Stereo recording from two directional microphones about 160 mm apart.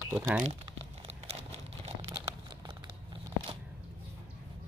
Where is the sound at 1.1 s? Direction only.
40° right (ahead or behind).